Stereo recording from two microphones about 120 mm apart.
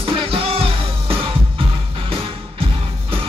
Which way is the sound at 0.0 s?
50° right (ahead or behind).